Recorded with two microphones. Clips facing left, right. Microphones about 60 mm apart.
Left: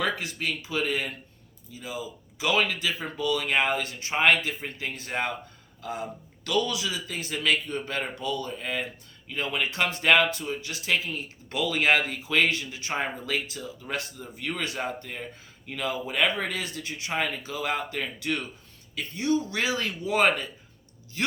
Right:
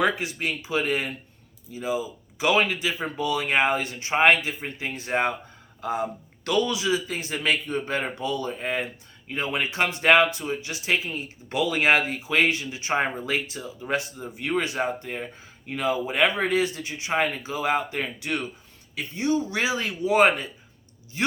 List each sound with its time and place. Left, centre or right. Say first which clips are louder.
0.0 s a man's voice: right 4 dB; right